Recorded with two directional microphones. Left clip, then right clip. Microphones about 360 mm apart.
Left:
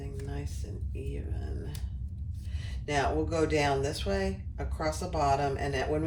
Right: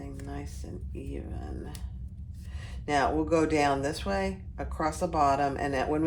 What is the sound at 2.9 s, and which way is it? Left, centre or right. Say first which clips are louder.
Speech: right 4 dB; centre.